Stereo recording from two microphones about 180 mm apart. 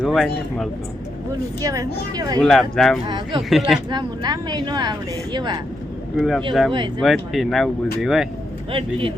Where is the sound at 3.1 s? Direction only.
25° right (ahead or behind).